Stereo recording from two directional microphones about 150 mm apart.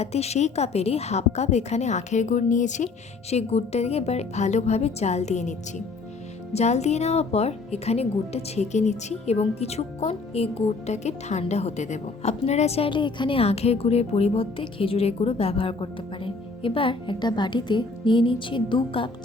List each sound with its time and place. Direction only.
0.0 s speech: 45° left (ahead or behind)